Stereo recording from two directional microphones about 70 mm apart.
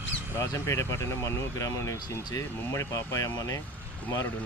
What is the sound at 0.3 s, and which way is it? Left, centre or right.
Speech, left.